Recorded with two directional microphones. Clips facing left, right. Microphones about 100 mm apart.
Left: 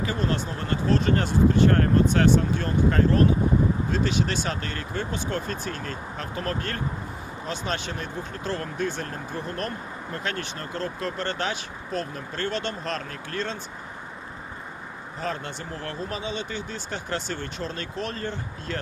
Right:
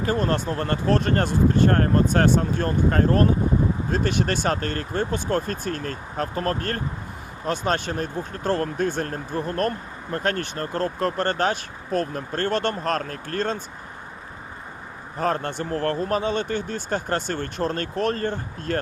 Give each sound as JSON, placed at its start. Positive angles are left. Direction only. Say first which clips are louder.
{"t": 0.0, "sound": "speech", "louder": "right 4 dB", "side_deg": -45}
{"t": 15.2, "sound": "speech", "louder": "right 7 dB", "side_deg": -50}